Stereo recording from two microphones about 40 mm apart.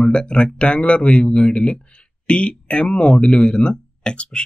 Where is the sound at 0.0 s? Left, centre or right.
Left.